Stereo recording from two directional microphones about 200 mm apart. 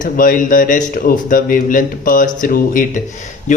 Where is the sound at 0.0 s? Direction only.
40° left (ahead or behind).